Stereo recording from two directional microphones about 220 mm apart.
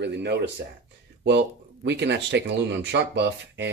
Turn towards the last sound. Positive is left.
turn(degrees=-50)  # may be behind; listen again after turning